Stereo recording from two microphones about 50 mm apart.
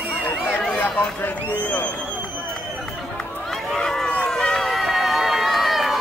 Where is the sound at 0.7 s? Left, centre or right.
Left.